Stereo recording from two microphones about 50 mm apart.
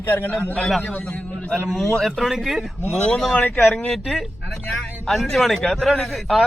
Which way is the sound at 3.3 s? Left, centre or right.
Left.